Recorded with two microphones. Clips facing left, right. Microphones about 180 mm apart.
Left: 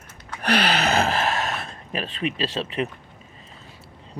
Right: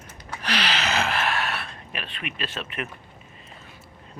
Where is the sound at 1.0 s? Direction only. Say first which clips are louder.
Left 3 dB; 40° left (ahead or behind).